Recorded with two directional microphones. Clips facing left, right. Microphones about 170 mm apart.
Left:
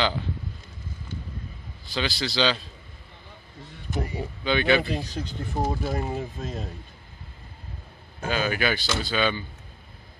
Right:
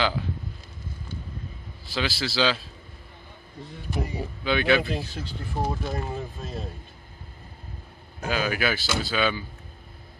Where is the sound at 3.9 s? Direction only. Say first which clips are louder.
Left 1 dB; centre (ahead or behind).